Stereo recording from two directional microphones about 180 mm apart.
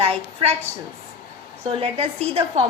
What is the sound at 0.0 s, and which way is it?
Speech, 35° right (ahead or behind).